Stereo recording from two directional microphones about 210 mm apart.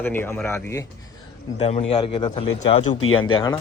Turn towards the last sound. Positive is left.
turn(degrees=20)  # may be behind; listen again after turning